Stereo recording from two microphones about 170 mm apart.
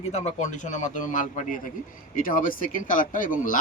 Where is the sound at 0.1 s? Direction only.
40° left (ahead or behind).